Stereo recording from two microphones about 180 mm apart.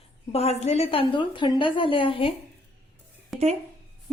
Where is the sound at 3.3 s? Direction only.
Centre (ahead or behind).